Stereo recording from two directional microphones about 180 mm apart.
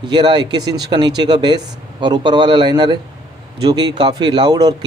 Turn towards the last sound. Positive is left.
turn(degrees=-20)  # may be behind; listen again after turning